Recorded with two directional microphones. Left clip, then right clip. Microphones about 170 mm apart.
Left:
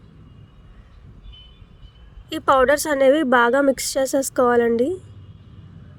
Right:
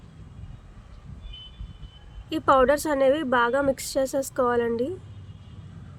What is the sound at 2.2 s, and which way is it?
A woman's voice, 40° left (ahead or behind).